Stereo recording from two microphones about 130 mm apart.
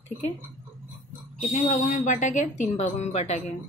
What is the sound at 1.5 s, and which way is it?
A woman's voice, 65° left (ahead or behind).